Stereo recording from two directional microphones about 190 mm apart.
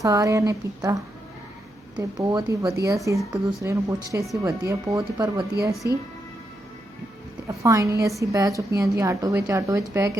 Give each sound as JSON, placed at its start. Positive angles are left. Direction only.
{"t": 0.0, "sound": "speech", "side_deg": -15}
{"t": 7.4, "sound": "speech", "side_deg": -15}